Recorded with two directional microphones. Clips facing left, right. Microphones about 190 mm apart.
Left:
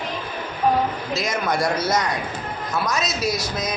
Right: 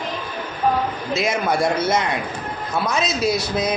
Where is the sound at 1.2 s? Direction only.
25° right (ahead or behind).